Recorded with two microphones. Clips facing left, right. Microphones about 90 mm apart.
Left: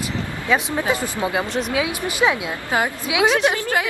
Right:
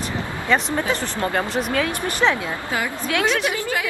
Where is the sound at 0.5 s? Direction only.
5° left (ahead or behind).